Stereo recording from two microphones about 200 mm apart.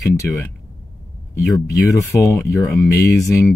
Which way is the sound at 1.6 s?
15° left (ahead or behind).